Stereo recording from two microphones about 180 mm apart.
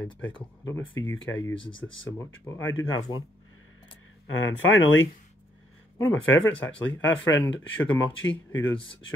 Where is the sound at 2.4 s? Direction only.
15° left (ahead or behind).